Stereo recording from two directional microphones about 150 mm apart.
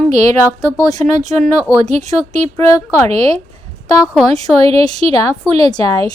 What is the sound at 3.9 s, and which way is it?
Speech, 5° right (ahead or behind).